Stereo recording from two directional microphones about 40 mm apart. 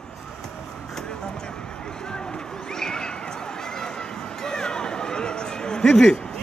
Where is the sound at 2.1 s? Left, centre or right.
Centre.